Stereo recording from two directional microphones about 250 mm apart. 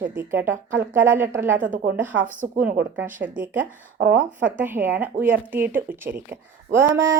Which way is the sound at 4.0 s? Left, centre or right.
Right.